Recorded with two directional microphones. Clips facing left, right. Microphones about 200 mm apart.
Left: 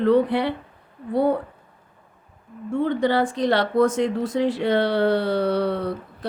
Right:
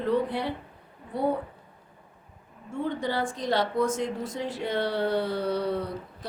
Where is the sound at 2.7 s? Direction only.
75° left (ahead or behind).